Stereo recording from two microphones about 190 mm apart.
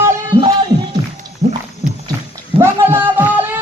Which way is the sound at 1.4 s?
55° right (ahead or behind).